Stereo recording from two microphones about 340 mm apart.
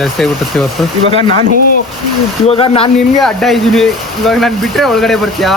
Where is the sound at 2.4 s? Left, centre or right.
Centre.